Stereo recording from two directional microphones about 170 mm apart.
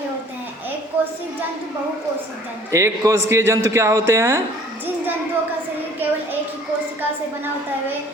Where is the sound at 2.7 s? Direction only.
15° right (ahead or behind).